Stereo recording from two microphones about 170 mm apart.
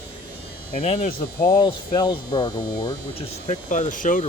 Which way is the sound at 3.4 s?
50° left (ahead or behind).